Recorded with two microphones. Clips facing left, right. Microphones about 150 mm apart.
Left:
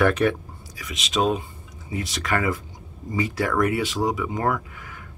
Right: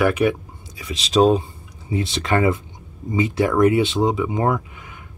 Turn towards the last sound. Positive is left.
turn(degrees=-20)  # may be behind; listen again after turning